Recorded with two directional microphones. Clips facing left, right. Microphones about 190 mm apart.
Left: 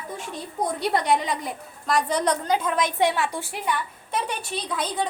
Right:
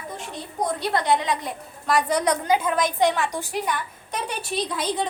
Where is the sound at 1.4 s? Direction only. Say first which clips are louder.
Even; 5° left (ahead or behind).